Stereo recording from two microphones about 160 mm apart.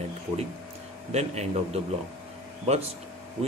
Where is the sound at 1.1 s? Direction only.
45° right (ahead or behind).